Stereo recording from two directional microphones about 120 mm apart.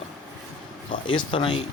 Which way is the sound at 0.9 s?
45° left (ahead or behind).